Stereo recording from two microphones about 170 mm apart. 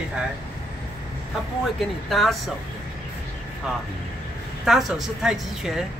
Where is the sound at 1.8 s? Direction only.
Centre (ahead or behind).